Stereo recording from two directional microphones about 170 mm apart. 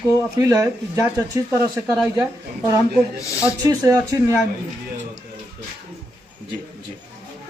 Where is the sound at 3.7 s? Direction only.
20° right (ahead or behind).